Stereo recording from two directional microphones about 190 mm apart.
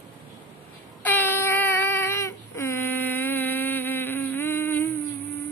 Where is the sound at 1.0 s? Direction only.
10° left (ahead or behind).